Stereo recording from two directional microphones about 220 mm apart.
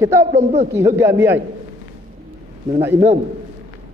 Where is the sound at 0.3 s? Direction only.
30° right (ahead or behind).